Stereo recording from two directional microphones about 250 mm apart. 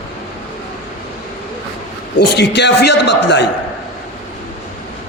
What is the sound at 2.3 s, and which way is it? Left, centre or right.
A man's voice, left.